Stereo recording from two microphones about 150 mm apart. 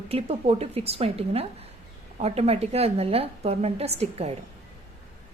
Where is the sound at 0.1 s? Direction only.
40° right (ahead or behind).